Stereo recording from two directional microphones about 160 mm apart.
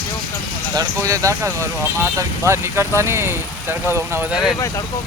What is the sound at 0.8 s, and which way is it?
Speech, 20° right (ahead or behind).